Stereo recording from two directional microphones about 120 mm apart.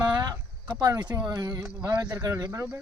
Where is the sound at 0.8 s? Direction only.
35° right (ahead or behind).